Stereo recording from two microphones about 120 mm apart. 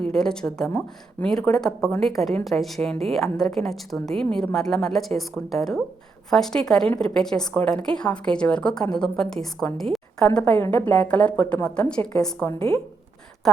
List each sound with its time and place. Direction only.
0.0 s a woman's voice: 5° left (ahead or behind)
12.5 s speech: 50° right (ahead or behind)